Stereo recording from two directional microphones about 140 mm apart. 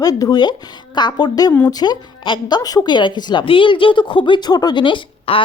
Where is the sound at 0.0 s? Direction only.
25° left (ahead or behind).